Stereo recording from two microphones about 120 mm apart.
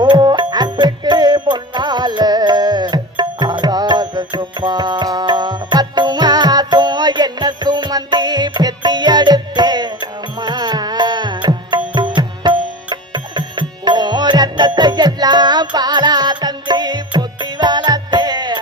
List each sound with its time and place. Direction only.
0.0 s music: 40° right (ahead or behind)